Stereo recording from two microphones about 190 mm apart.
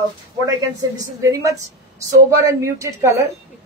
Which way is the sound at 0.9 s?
15° right (ahead or behind).